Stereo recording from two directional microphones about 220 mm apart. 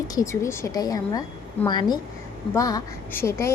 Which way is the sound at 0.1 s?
15° left (ahead or behind).